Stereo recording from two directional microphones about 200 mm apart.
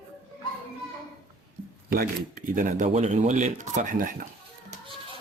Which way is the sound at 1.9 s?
45° right (ahead or behind).